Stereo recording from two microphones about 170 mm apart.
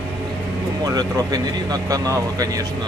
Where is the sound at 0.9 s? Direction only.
20° right (ahead or behind).